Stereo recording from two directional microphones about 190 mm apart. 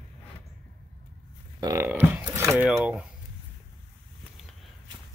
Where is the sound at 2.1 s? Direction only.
10° right (ahead or behind).